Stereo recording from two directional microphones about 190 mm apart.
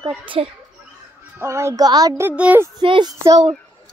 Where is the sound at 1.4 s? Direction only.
15° right (ahead or behind).